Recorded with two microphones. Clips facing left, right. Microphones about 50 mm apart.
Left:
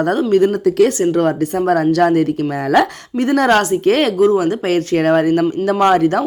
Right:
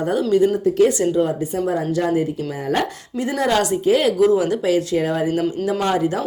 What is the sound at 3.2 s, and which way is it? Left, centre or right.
Speech, left.